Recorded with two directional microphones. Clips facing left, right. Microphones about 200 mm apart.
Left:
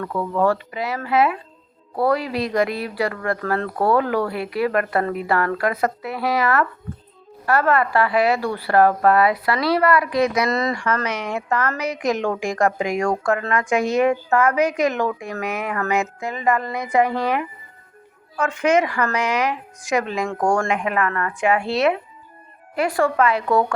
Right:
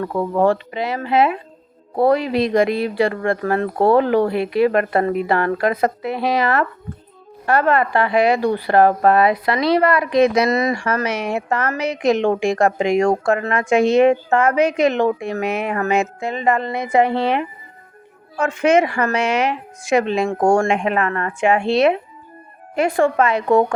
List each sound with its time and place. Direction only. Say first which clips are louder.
0.0 s a woman's voice: right 3 dB; 25° right (ahead or behind)
11.3 s a woman's voice: right 2 dB; 25° right (ahead or behind)